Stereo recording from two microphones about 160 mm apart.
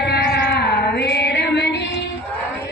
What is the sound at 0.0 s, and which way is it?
Female singing, 90° left.